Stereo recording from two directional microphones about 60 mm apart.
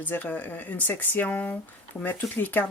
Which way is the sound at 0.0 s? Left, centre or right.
Left.